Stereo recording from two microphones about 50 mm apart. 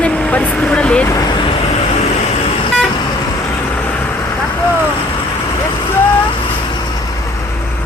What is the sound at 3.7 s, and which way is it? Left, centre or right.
Vehicle, left.